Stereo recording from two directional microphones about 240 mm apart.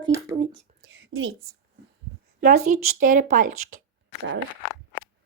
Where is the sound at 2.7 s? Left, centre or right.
Right.